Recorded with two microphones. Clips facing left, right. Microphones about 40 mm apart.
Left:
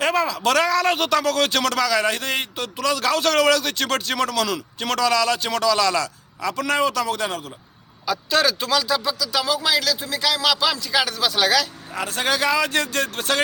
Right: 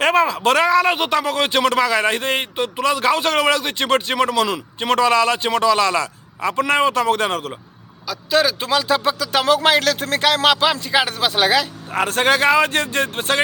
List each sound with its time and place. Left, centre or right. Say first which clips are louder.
0.0 s speech: right 4 dB; right
8.3 s speech: right 3 dB; centre
8.6 s speech: right 3 dB; right
9.0 s speech: right 6 dB; right
11.9 s speech: right 6 dB; right